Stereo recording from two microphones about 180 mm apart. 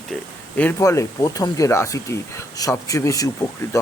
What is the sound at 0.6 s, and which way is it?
Speech, 15° left (ahead or behind).